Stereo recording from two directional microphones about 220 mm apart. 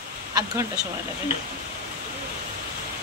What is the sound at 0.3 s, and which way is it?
Speech, 15° right (ahead or behind).